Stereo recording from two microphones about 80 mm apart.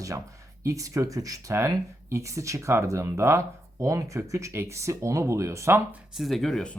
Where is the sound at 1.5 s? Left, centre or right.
Right.